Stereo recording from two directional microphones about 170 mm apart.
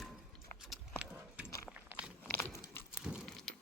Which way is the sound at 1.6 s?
10° right (ahead or behind).